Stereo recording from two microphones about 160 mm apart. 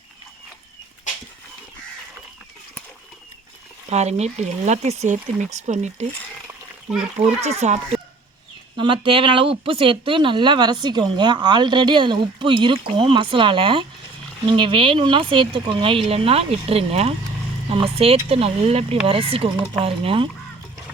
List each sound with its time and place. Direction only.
3.8 s speech: 45° right (ahead or behind)
7.2 s speech: 40° right (ahead or behind)
8.7 s speech: 30° right (ahead or behind)